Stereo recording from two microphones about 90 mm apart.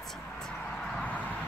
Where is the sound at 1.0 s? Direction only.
15° left (ahead or behind).